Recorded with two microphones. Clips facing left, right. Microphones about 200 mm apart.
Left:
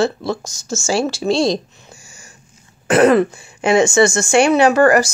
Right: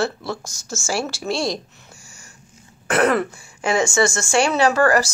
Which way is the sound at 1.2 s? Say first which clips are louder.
Left 8 dB; 90° left.